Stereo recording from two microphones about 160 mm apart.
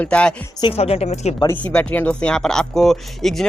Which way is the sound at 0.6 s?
35° left (ahead or behind).